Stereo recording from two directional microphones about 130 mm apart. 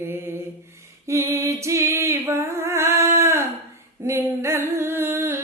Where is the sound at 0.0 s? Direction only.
15° right (ahead or behind).